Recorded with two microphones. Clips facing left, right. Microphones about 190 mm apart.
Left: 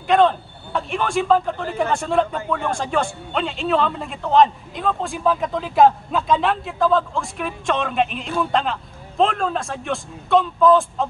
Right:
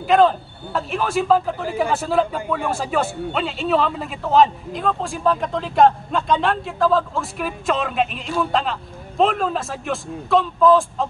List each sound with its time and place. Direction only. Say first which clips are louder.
0.0 s speech: right 1 dB; centre (ahead or behind)